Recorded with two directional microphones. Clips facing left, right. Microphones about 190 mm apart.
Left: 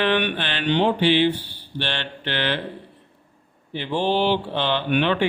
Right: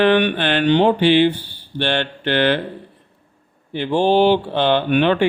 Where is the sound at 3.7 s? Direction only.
50° right (ahead or behind).